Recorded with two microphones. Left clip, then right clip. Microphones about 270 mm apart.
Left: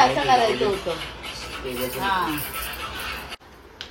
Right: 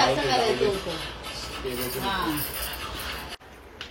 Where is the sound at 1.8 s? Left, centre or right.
Centre.